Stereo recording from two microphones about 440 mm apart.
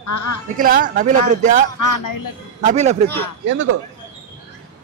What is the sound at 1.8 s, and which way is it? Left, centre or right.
Speech, left.